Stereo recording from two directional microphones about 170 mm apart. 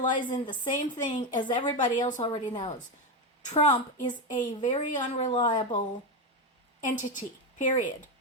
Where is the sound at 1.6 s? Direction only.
30° left (ahead or behind).